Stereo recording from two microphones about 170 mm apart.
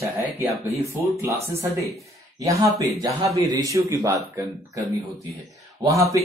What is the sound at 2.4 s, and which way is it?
Speech, 20° right (ahead or behind).